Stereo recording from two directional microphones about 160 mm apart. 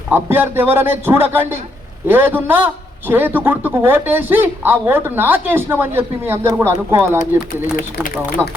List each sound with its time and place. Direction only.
0.1 s speech: 15° right (ahead or behind)
7.5 s speech: 55° left (ahead or behind)